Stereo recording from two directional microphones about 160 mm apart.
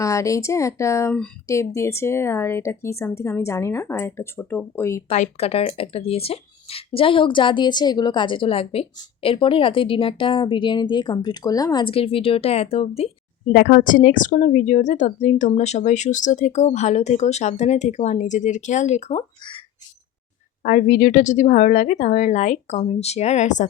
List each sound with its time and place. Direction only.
0.0 s speech: 20° left (ahead or behind)
5.0 s speech: 45° left (ahead or behind)
13.5 s a woman's voice: 65° left (ahead or behind); by 19.2 s 45° left (ahead or behind)
20.7 s a woman's voice: 55° left (ahead or behind)